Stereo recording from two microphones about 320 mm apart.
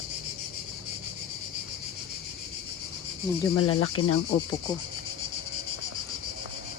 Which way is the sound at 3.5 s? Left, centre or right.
Left.